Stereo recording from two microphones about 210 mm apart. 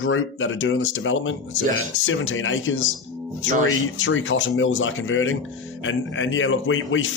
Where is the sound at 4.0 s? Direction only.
65° left (ahead or behind).